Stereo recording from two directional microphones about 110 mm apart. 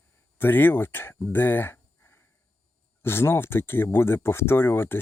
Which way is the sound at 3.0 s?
20° left (ahead or behind).